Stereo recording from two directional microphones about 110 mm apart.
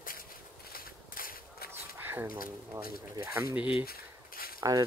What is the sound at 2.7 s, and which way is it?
Speech, 25° right (ahead or behind).